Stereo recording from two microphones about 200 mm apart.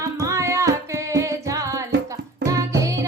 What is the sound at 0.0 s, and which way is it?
Music, 15° right (ahead or behind).